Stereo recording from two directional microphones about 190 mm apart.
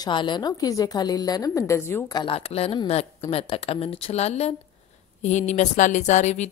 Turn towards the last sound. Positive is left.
turn(degrees=35)  # may be behind; listen again after turning